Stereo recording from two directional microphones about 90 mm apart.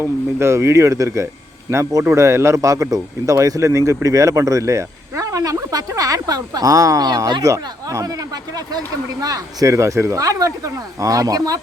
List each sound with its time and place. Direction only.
0.0 s speech: 30° right (ahead or behind); by 7.4 s 50° right (ahead or behind)
7.4 s speech: 35° right (ahead or behind)